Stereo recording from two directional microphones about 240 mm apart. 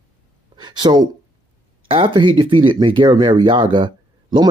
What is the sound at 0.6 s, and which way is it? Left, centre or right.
Speech, centre.